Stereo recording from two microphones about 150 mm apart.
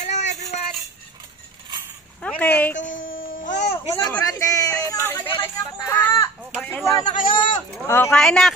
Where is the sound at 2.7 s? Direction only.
60° left (ahead or behind).